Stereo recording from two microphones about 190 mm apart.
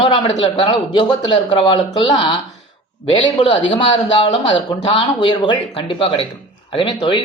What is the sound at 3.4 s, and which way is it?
A man's voice, 30° left (ahead or behind).